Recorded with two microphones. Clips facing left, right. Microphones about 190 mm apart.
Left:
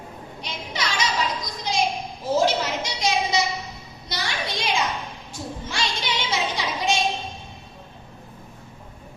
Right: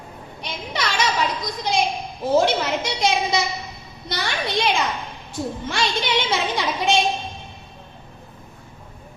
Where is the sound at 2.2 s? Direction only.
60° right (ahead or behind).